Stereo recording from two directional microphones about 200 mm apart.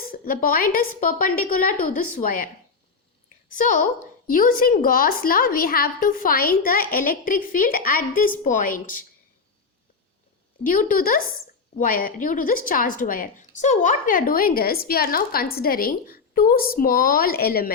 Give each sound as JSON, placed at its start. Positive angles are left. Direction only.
{"t": 0.1, "sound": "a woman's voice", "side_deg": 45}
{"t": 3.5, "sound": "a woman's voice", "side_deg": 40}
{"t": 10.7, "sound": "a woman's voice", "side_deg": 45}